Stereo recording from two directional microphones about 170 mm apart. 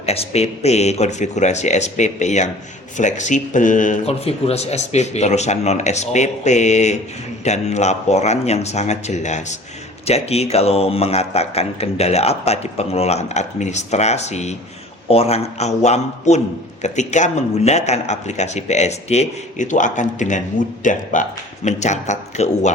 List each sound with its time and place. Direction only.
0.0 s a man's voice: 35° left (ahead or behind)